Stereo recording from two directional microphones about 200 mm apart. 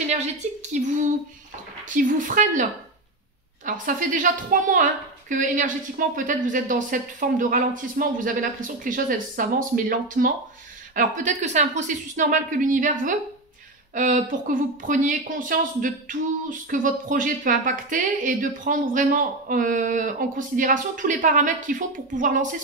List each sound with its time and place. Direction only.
0.1 s a woman's voice: 35° right (ahead or behind)
2.0 s a woman's voice: 40° right (ahead or behind)
3.6 s a woman's voice: 40° right (ahead or behind)